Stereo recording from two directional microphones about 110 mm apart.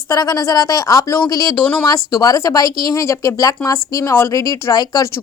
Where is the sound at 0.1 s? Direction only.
30° left (ahead or behind).